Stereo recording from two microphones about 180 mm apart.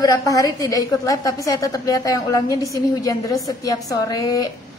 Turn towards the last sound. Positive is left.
turn(degrees=20)  # may be behind; listen again after turning